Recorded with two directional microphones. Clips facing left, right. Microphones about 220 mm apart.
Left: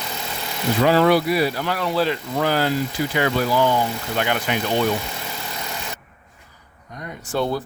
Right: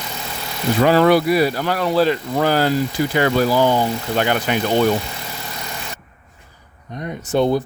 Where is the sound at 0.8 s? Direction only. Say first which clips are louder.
Right 3 dB; 50° right (ahead or behind); by 4.3 s 35° right (ahead or behind).